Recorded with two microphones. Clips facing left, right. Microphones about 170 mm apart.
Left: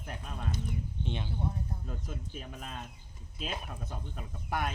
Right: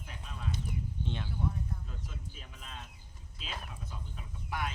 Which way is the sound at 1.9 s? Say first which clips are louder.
Left 6 dB; 50° left (ahead or behind).